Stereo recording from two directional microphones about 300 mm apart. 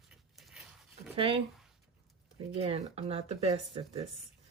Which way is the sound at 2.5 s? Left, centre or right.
Centre.